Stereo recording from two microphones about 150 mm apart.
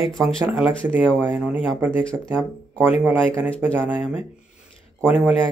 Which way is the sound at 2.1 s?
5° left (ahead or behind).